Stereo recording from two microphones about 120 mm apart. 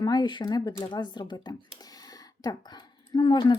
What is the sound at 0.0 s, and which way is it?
Speech, 35° left (ahead or behind).